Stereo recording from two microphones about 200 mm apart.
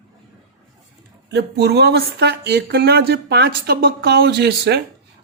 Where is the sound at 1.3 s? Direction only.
55° right (ahead or behind).